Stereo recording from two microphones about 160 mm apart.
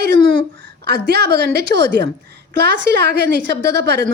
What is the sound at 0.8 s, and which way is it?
A woman's voice, 90° right.